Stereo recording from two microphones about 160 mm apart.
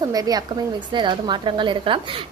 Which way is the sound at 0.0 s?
25° right (ahead or behind).